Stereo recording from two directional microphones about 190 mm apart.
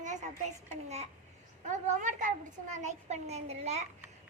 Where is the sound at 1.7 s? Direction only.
40° right (ahead or behind).